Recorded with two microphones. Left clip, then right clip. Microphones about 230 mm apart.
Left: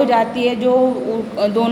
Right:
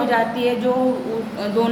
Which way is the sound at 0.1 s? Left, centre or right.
Left.